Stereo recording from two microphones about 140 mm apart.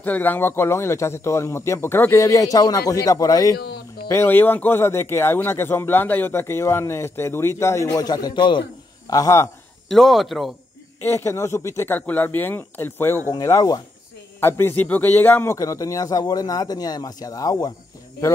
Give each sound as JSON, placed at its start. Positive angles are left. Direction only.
{"t": 0.0, "sound": "a man's voice", "side_deg": 15}
{"t": 9.1, "sound": "speech", "side_deg": 20}
{"t": 9.8, "sound": "speech", "side_deg": 0}
{"t": 11.0, "sound": "a man's voice", "side_deg": 15}
{"t": 15.5, "sound": "speech", "side_deg": 25}